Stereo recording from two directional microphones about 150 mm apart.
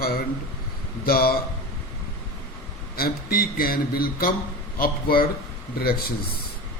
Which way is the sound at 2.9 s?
80° left.